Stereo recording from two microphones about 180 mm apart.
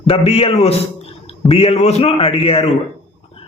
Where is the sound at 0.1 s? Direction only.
35° left (ahead or behind).